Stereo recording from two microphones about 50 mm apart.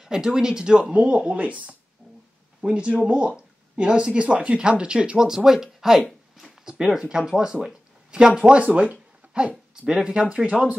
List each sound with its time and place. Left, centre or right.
0.0 s speech: centre
2.6 s speech: right
6.3 s a sound: centre
6.7 s speech: centre